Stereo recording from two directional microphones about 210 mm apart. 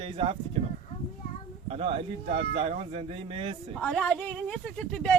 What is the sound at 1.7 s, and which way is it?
Speech, 25° right (ahead or behind).